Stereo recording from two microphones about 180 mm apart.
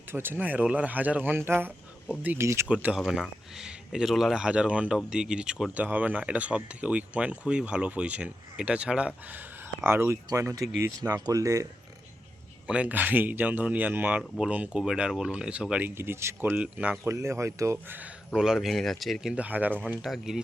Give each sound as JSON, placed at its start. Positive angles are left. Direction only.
{"t": 0.1, "sound": "speech", "side_deg": -10}
{"t": 12.6, "sound": "speech", "side_deg": -5}